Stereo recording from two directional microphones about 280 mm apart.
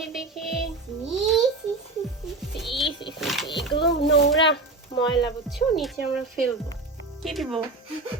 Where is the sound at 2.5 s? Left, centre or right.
Centre.